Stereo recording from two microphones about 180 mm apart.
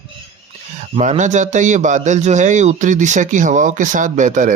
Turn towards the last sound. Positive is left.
turn(degrees=-45)  # may be behind; listen again after turning